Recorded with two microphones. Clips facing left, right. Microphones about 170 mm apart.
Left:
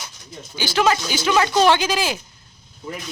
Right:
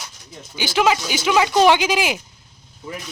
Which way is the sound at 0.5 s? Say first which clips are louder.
Right 1 dB; 15° right (ahead or behind).